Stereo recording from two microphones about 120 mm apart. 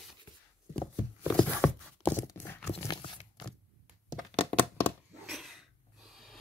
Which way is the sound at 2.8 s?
35° left (ahead or behind).